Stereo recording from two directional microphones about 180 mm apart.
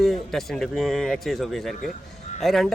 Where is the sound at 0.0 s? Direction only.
Centre (ahead or behind).